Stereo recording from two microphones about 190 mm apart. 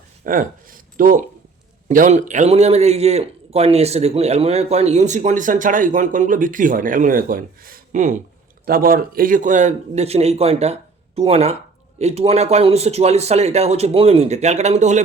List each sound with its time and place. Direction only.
0.3 s a man's voice: 45° right (ahead or behind)